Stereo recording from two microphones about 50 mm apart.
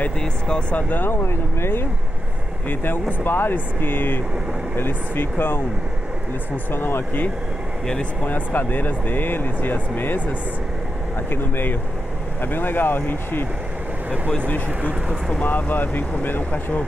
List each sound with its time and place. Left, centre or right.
0.2 s speech: centre
0.7 s speech: left
1.1 s speech: left
2.7 s speech: left
7.8 s speech: centre
8.2 s speech: left
15.4 s speech: left